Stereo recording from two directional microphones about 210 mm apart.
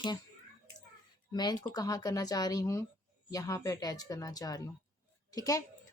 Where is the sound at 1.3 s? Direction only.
20° left (ahead or behind).